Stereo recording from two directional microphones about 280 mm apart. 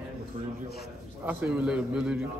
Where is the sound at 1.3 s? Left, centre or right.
Centre.